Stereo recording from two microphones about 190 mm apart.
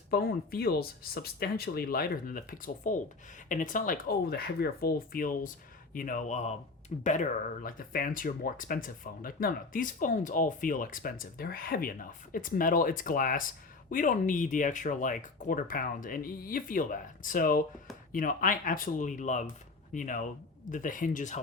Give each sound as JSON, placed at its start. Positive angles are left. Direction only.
{"t": 0.1, "sound": "speech", "side_deg": 55}